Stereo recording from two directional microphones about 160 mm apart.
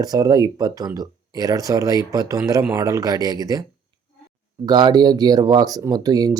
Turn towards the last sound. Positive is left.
turn(degrees=-25)  # may be behind; listen again after turning